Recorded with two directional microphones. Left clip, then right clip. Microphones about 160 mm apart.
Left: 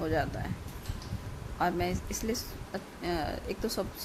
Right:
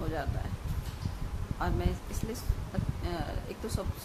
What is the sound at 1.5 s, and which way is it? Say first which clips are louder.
Speech: left 5 dB; 35° left (ahead or behind).